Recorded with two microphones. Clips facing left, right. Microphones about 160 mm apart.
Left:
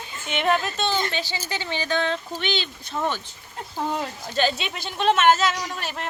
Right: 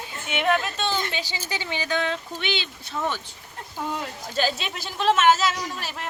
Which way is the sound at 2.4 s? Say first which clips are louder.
Left 1 dB; 40° left (ahead or behind).